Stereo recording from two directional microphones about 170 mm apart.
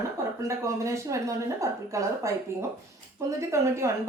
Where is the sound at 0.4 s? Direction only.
15° right (ahead or behind).